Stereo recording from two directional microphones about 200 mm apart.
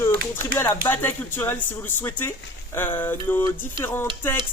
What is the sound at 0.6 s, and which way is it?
Speech, 10° left (ahead or behind).